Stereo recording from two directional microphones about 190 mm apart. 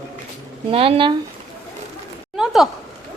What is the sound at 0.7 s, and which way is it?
Speech, 30° right (ahead or behind).